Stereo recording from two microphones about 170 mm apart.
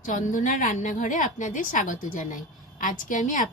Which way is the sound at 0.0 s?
50° left (ahead or behind).